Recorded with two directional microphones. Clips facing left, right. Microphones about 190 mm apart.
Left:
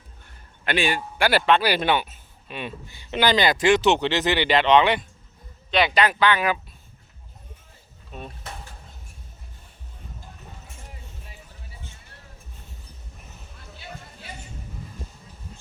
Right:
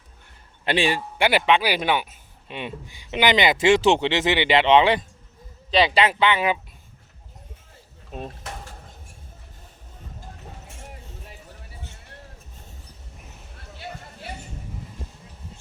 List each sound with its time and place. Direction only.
0.6 s a man's voice: 30° right (ahead or behind)
1.3 s speech: 15° right (ahead or behind)